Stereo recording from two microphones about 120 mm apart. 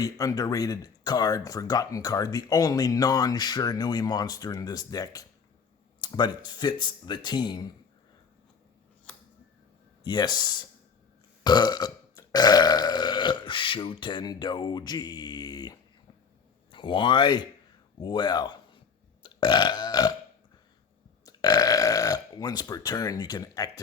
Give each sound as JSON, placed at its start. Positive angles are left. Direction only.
{"t": 0.0, "sound": "speech", "side_deg": 30}
{"t": 10.0, "sound": "speech", "side_deg": 35}
{"t": 11.4, "sound": "burping", "side_deg": 35}
{"t": 16.7, "sound": "speech", "side_deg": 45}
{"t": 19.2, "sound": "burping", "side_deg": 40}
{"t": 21.2, "sound": "a man's voice", "side_deg": 30}